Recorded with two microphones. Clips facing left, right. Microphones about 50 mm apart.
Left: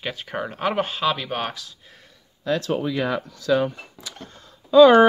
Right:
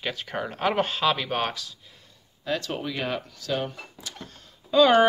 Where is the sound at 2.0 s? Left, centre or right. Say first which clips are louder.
Left 4 dB; left.